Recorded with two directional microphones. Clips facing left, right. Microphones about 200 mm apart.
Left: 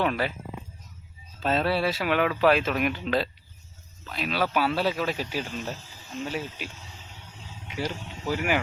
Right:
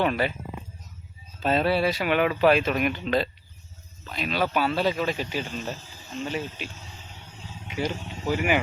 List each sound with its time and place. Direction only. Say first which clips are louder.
0.0 s speech: right 2 dB; centre (ahead or behind)
1.4 s speech: right 2 dB; centre (ahead or behind)
7.8 s speech: right 3 dB; 20° right (ahead or behind)